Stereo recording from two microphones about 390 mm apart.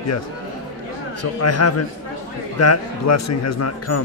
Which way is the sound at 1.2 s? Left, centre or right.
Left.